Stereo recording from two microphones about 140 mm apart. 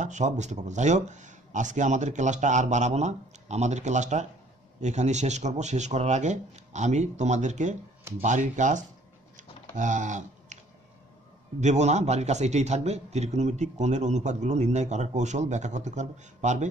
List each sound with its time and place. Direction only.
0.0 s a man's voice: 60° right (ahead or behind)
9.4 s typing: 65° right (ahead or behind)
11.6 s a man's voice: 55° right (ahead or behind)